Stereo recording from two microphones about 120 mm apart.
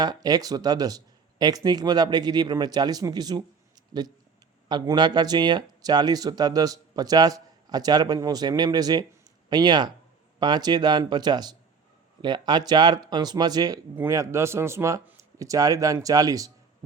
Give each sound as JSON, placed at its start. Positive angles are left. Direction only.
{"t": 0.0, "sound": "speech", "side_deg": -35}
{"t": 4.7, "sound": "speech", "side_deg": -35}
{"t": 13.9, "sound": "a man's voice", "side_deg": -20}